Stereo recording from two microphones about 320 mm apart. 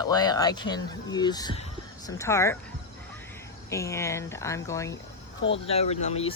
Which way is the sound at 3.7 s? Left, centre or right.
Centre.